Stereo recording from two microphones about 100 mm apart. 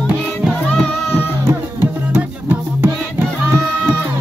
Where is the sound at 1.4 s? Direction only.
20° right (ahead or behind).